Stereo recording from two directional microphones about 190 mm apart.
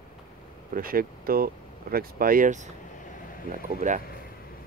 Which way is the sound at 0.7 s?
50° right (ahead or behind).